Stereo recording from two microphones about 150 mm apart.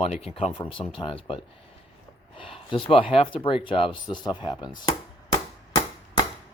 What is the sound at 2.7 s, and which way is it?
Speech, 35° left (ahead or behind).